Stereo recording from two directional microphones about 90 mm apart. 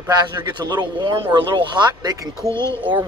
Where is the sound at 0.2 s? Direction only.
55° right (ahead or behind).